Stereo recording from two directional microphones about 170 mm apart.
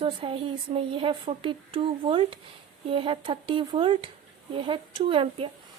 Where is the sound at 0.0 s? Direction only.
30° right (ahead or behind).